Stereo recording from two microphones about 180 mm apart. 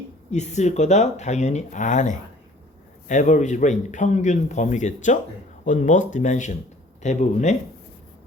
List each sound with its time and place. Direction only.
0.3 s speech: 40° left (ahead or behind)